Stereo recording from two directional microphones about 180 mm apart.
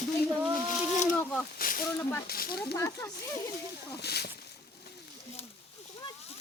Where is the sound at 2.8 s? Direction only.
15° left (ahead or behind).